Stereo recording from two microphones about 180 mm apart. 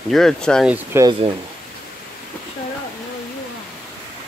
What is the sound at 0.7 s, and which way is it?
Speech, 10° right (ahead or behind).